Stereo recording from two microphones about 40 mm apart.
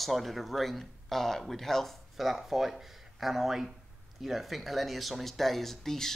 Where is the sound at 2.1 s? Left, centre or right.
Centre.